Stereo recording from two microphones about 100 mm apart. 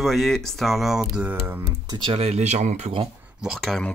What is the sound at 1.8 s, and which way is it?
Speech, 45° right (ahead or behind).